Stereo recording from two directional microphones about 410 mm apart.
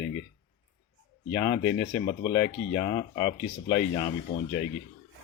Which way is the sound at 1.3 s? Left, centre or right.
Centre.